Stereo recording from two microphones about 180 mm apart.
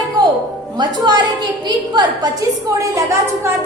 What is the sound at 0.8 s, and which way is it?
A woman's voice, 25° right (ahead or behind).